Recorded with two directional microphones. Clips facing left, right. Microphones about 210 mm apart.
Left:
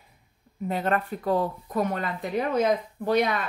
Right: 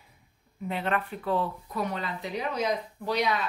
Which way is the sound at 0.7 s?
40° left (ahead or behind).